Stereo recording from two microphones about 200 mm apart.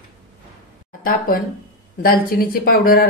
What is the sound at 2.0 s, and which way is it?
Speech, 45° left (ahead or behind).